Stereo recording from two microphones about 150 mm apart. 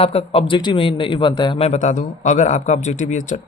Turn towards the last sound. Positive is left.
turn(degrees=55)  # may be behind; listen again after turning